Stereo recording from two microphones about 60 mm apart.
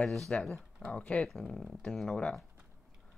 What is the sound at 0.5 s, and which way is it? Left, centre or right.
Speech, centre.